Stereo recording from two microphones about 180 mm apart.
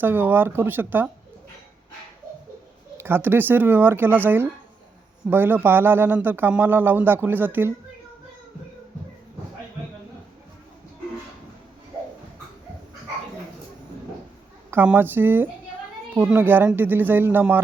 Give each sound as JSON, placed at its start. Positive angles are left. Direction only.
{"t": 0.0, "sound": "speech", "side_deg": -10}
{"t": 3.0, "sound": "speech", "side_deg": -10}
{"t": 14.7, "sound": "speech", "side_deg": -10}